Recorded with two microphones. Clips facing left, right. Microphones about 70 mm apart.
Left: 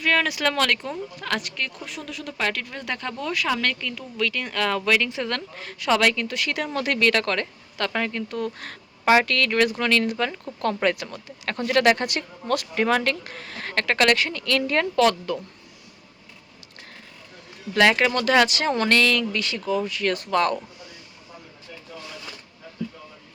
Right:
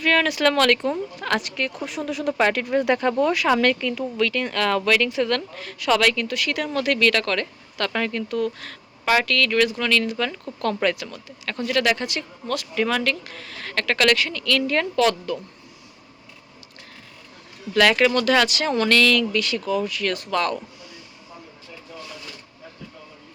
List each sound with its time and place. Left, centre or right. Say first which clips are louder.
0.0 s speech: right 3 dB; centre
5.0 s speech: right 5 dB; left
8.3 s speech: right 4 dB; left
11.3 s speech: left 1 dB; left
17.7 s speech: right 1 dB; left